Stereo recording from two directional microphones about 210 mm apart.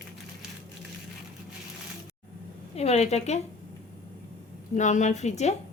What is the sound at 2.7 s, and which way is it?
Speech, 30° left (ahead or behind).